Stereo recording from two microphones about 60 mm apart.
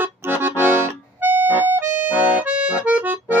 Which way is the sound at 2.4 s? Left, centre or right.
Centre.